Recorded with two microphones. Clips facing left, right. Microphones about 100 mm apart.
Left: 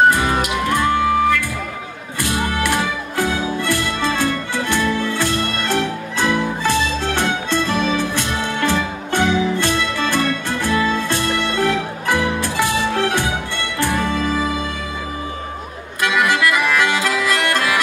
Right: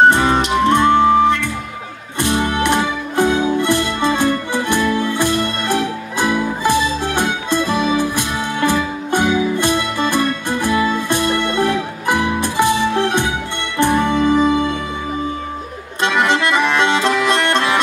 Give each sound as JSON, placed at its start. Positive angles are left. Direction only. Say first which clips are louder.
{"t": 0.1, "sound": "music", "louder": "right 4 dB", "side_deg": -25}
{"t": 16.0, "sound": "accordion", "louder": "right 1 dB", "side_deg": -25}